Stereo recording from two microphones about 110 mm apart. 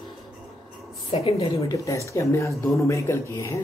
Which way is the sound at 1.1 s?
60° left (ahead or behind).